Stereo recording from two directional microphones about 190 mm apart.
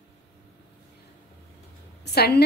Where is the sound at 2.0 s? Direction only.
60° left (ahead or behind).